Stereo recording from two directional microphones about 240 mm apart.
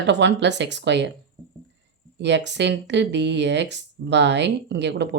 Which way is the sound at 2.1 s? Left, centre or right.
Right.